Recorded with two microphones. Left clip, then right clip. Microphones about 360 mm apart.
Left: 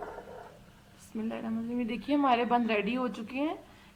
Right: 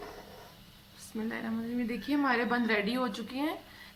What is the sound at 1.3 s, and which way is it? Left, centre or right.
Speech, centre.